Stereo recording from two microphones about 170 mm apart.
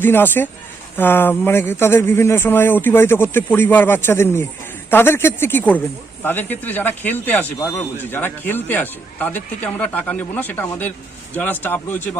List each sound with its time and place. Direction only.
0.0 s speech: 10° left (ahead or behind)